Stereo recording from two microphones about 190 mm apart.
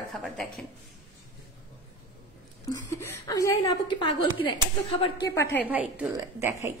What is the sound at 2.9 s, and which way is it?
A woman's voice, 15° left (ahead or behind).